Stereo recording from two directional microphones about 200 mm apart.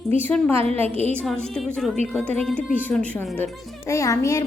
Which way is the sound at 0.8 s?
30° right (ahead or behind).